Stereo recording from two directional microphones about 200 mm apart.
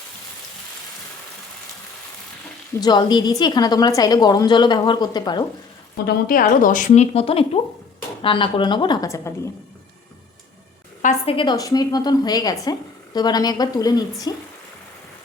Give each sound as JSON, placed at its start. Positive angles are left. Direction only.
{"t": 2.8, "sound": "a woman's voice", "side_deg": 20}
{"t": 6.1, "sound": "a woman's voice", "side_deg": 45}
{"t": 11.0, "sound": "a woman's voice", "side_deg": 25}